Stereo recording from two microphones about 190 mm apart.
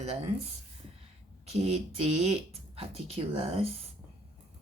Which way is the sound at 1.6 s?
35° right (ahead or behind).